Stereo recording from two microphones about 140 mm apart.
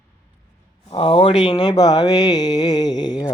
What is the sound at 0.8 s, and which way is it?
Speech, 40° left (ahead or behind).